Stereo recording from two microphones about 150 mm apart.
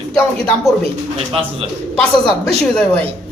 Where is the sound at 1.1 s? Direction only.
40° right (ahead or behind).